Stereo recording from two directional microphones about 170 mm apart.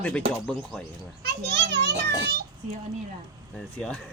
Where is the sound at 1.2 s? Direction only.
70° right (ahead or behind).